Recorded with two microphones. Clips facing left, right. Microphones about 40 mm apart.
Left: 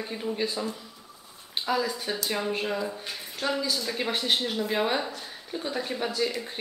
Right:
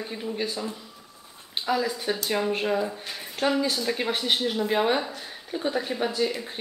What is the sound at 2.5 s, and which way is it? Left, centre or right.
Speech, centre.